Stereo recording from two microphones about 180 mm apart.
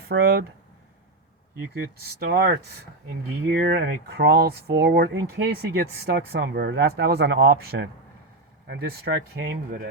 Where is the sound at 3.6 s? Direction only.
60° right (ahead or behind).